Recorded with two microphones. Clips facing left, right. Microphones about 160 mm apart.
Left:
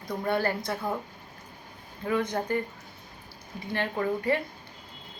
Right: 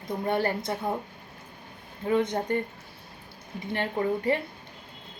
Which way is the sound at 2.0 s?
25° right (ahead or behind).